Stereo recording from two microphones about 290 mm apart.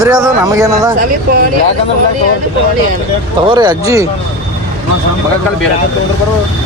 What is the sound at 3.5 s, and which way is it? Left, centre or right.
Speech, centre.